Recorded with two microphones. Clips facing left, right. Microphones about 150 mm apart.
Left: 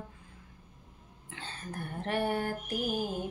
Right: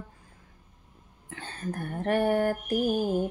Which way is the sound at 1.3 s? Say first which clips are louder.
Right 7 dB; 50° right (ahead or behind).